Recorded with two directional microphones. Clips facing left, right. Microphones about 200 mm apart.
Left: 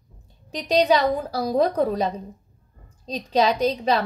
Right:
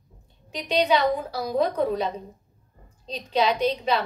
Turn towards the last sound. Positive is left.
turn(degrees=40)  # may be behind; listen again after turning